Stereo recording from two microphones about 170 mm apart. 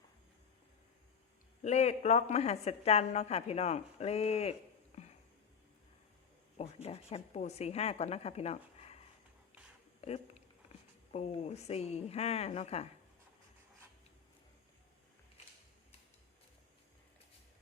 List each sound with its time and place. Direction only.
1.6 s a woman's voice: 40° left (ahead or behind)
6.8 s a woman's voice: 35° left (ahead or behind)
10.0 s a woman's voice: 40° left (ahead or behind)